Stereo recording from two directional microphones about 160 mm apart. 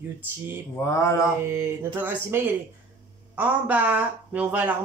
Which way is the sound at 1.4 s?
15° right (ahead or behind).